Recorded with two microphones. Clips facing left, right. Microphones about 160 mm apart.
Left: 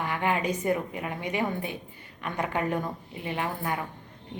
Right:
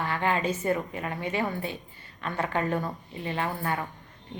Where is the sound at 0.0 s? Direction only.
15° left (ahead or behind).